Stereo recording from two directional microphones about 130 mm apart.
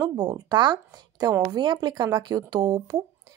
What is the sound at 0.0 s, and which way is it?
Speech, 35° right (ahead or behind).